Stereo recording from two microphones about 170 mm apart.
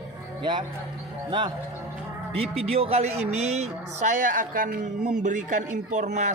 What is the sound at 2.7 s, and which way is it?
Speech, 35° right (ahead or behind).